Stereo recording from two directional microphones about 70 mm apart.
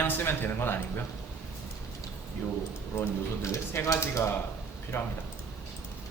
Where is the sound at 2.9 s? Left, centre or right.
Left.